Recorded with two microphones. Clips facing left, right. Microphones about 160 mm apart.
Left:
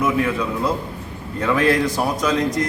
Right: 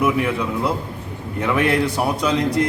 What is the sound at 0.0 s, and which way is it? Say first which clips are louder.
Speech: even; 15° right (ahead or behind).